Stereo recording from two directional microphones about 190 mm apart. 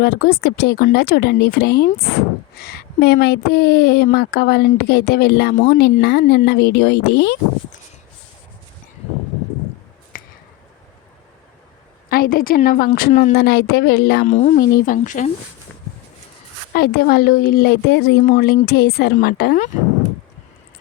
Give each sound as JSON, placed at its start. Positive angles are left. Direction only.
{"t": 0.0, "sound": "speech", "side_deg": 55}
{"t": 10.1, "sound": "finger snapping", "side_deg": 45}
{"t": 12.0, "sound": "a woman's voice", "side_deg": 50}
{"t": 14.3, "sound": "a woman's voice", "side_deg": 35}
{"t": 16.7, "sound": "speech", "side_deg": 55}